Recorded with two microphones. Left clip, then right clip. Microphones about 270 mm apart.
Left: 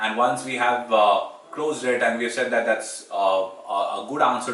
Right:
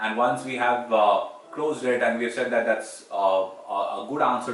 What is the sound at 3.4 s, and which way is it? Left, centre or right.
Speech, right.